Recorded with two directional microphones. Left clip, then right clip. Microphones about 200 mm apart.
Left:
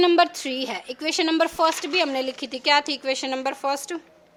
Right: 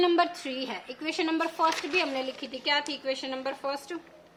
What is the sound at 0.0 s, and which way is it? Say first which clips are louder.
A woman's voice: left 6 dB; 40° left (ahead or behind).